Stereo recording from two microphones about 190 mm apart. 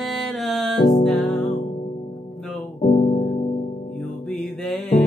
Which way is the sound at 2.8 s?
35° left (ahead or behind).